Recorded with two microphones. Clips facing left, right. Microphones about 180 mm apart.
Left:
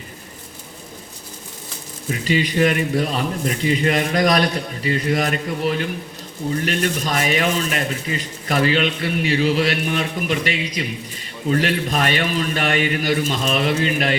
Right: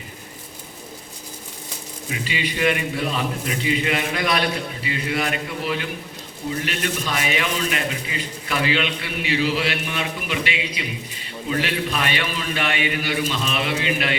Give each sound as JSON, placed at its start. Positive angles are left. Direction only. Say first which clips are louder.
{"t": 2.0, "sound": "speech", "louder": "left 7 dB", "side_deg": 45}